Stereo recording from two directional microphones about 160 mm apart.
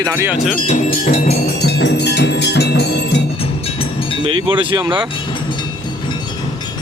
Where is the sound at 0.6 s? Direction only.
40° left (ahead or behind).